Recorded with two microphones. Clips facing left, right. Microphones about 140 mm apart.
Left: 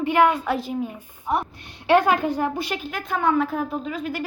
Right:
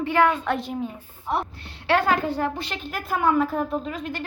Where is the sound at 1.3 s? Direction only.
15° left (ahead or behind).